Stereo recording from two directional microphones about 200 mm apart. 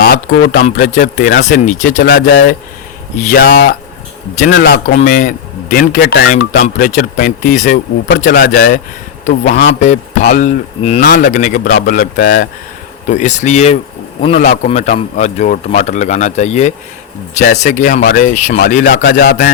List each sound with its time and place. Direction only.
0.0 s a man's voice: 45° left (ahead or behind)
4.9 s a man's voice: 40° left (ahead or behind)
13.1 s a man's voice: 35° left (ahead or behind)